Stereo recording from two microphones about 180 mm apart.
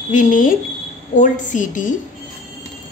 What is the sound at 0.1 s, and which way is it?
Speech, 45° left (ahead or behind).